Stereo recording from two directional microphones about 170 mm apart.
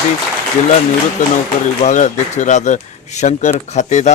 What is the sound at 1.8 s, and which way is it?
A man's voice, 45° left (ahead or behind).